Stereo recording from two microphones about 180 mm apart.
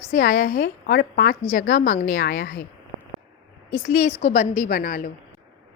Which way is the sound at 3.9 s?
40° left (ahead or behind).